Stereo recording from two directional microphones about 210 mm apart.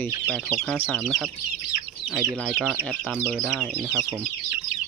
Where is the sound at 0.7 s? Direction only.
5° left (ahead or behind).